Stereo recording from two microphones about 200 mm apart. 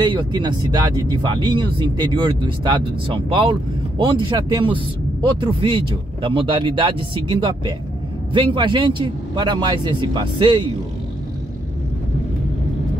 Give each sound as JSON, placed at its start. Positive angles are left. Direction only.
{"t": 0.0, "sound": "speech", "side_deg": -20}